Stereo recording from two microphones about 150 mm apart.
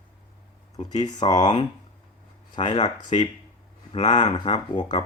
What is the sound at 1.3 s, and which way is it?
Speech, 50° left (ahead or behind).